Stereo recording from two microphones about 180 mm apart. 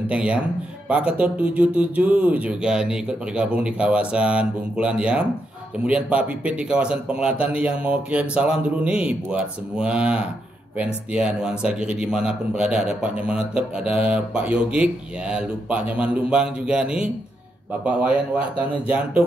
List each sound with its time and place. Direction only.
0.0 s speech: 5° right (ahead or behind)